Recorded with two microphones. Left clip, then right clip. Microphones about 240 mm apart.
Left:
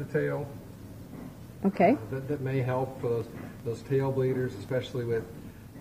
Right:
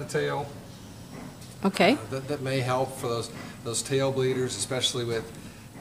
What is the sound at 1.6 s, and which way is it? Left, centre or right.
Speech, right.